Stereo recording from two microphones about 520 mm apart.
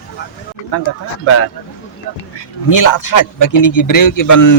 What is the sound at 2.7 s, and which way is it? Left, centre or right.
Speech, left.